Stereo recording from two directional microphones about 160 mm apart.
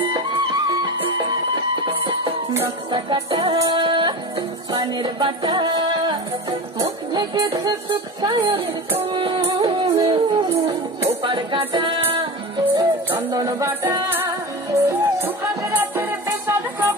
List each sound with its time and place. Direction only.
0.7 s music: 30° right (ahead or behind)
13.1 s music: 20° right (ahead or behind)